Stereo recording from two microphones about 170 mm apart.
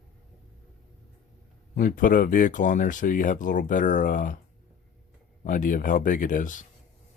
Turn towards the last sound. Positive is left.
turn(degrees=50)  # may be behind; listen again after turning